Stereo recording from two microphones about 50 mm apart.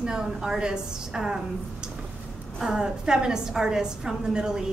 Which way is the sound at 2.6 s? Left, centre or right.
Centre.